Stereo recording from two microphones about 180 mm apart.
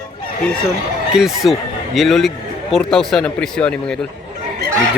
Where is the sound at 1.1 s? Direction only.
Centre (ahead or behind).